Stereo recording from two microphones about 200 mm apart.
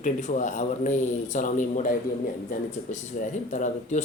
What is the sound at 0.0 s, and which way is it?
A man's voice, 40° left (ahead or behind).